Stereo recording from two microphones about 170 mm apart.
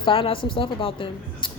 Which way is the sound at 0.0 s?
30° left (ahead or behind).